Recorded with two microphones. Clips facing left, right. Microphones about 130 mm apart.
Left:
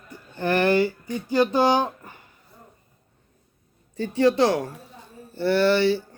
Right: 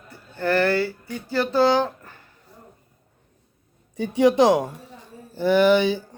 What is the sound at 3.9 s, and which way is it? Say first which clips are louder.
Speech: right 2 dB; 15° right (ahead or behind).